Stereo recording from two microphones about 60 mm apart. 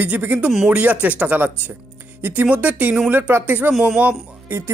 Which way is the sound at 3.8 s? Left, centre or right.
Centre.